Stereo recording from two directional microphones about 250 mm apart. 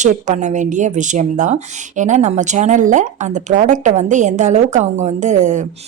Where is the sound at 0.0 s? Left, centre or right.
Right.